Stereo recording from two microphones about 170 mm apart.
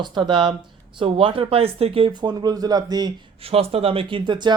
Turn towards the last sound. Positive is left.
turn(degrees=-25)  # may be behind; listen again after turning